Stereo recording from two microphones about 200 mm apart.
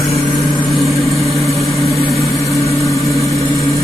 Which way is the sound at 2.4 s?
15° left (ahead or behind).